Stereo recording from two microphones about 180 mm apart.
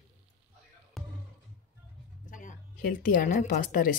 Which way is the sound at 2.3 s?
45° left (ahead or behind).